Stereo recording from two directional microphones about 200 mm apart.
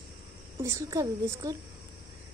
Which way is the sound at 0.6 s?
15° right (ahead or behind).